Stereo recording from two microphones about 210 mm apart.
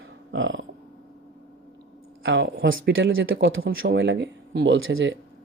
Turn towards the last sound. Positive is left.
turn(degrees=-65)  # may be behind; listen again after turning